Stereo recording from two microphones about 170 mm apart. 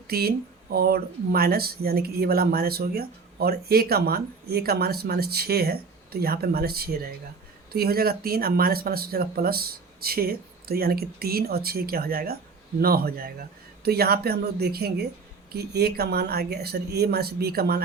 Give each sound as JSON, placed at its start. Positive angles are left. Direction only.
{"t": 0.1, "sound": "speech", "side_deg": -65}